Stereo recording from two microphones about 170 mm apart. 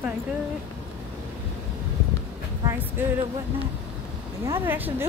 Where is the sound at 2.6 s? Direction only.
15° right (ahead or behind).